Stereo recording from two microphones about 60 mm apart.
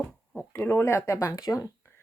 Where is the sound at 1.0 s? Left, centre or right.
Left.